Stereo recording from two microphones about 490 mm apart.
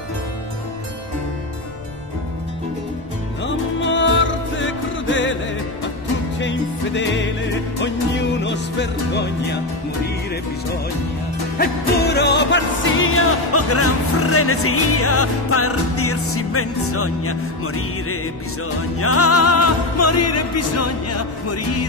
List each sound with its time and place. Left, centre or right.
3.4 s music: left
6.4 s music: left
11.5 s music: centre